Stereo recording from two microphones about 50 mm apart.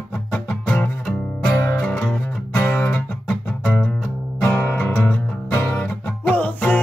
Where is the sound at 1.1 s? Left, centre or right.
Centre.